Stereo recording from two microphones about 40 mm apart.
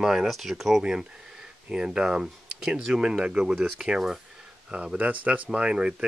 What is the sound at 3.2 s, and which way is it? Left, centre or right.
Speech, right.